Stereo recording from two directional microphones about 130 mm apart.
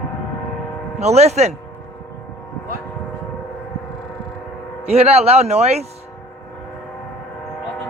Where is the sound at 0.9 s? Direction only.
55° right (ahead or behind).